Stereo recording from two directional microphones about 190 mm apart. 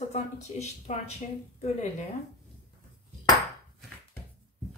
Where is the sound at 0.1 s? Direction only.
35° left (ahead or behind).